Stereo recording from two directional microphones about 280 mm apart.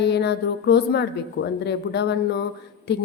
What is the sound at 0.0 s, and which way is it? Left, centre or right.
A woman's voice, left.